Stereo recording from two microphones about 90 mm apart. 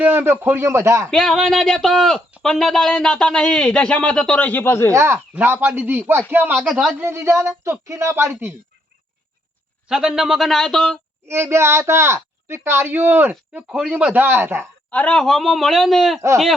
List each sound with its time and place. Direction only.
0.0 s speech: 25° right (ahead or behind)
1.1 s speech: 5° left (ahead or behind); by 4.9 s 30° left (ahead or behind)
4.9 s speech: 30° right (ahead or behind)
5.3 s speech: 20° right (ahead or behind)
9.9 s speech: 5° right (ahead or behind)
11.3 s speech: 30° right (ahead or behind)
13.5 s speech: 15° right (ahead or behind)
14.8 s speech: 15° left (ahead or behind)